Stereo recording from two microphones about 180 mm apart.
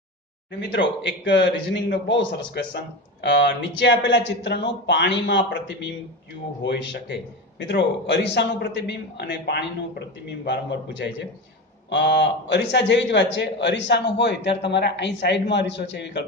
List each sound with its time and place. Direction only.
0.6 s a man's voice: 80° left